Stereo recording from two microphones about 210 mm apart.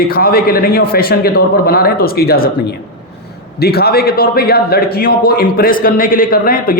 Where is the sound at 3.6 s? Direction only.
50° left (ahead or behind).